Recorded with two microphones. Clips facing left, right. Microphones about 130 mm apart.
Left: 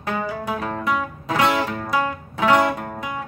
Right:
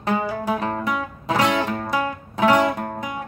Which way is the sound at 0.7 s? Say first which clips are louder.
Left 2 dB; 15° right (ahead or behind).